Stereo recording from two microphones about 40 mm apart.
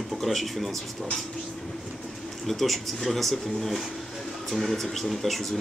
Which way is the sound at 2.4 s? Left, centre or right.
Centre.